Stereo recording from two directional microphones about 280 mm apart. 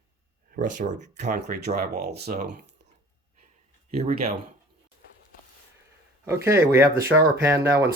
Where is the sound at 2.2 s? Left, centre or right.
Right.